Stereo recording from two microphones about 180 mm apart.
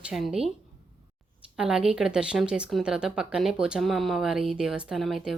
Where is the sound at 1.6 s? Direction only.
5° right (ahead or behind).